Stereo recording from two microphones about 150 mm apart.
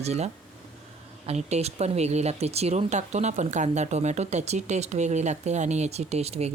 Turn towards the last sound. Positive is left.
turn(degrees=-45)  # may be behind; listen again after turning